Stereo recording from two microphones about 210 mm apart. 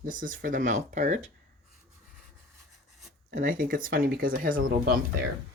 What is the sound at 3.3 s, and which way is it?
Speech, 40° right (ahead or behind).